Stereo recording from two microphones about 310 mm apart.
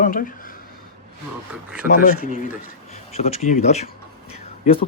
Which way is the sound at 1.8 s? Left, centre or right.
Left.